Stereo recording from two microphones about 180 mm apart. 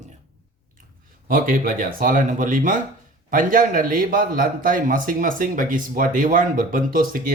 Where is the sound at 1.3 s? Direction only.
50° right (ahead or behind).